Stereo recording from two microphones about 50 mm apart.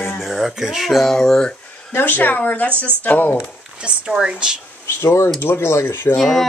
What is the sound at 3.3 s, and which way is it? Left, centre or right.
Speech, centre.